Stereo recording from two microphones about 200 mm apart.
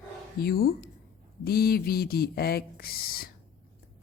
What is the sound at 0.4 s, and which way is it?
Speech, 50° left (ahead or behind).